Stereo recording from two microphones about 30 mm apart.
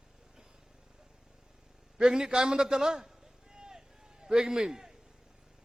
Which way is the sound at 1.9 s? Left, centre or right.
Right.